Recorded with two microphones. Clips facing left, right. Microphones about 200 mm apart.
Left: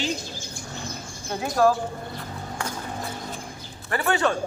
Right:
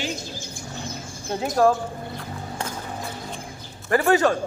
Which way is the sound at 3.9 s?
40° right (ahead or behind).